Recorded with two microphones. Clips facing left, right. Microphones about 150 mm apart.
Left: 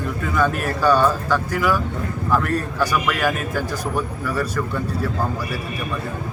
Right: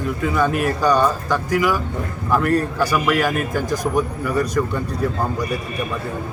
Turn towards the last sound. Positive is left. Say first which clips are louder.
# right 3 dB
turn(degrees=-15)  # may be behind; listen again after turning